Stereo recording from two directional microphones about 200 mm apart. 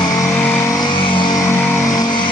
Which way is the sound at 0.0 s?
20° left (ahead or behind).